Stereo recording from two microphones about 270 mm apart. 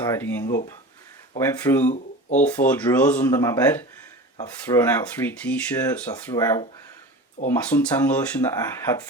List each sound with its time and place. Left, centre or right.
0.0 s speech: centre
0.4 s speech: left
1.4 s speech: centre